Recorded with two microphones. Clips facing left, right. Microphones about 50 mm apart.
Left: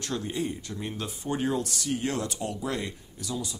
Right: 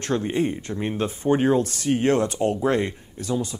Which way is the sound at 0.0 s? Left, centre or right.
Right.